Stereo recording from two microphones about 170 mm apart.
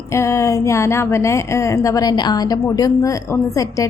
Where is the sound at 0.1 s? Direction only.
15° left (ahead or behind).